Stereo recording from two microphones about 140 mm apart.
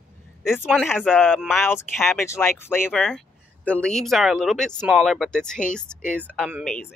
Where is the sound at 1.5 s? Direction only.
15° left (ahead or behind).